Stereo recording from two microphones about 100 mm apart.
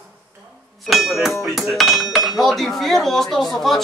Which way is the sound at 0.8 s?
Centre (ahead or behind).